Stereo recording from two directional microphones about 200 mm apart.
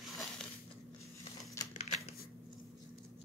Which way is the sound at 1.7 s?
35° left (ahead or behind).